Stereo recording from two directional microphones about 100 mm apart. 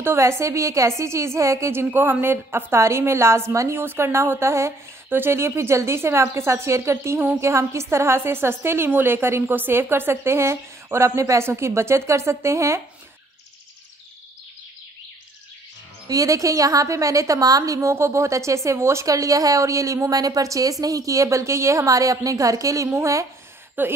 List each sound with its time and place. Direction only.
0.0 s a woman's voice: 25° right (ahead or behind)
16.1 s a woman's voice: 35° right (ahead or behind)
23.8 s speech: 20° right (ahead or behind)